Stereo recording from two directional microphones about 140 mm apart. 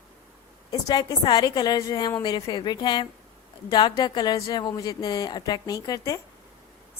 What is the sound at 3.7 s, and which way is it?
Speech, 30° left (ahead or behind).